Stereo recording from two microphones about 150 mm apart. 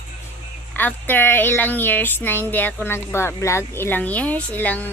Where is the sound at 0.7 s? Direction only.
10° left (ahead or behind).